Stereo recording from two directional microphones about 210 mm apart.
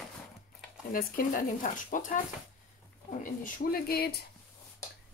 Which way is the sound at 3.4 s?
45° left (ahead or behind).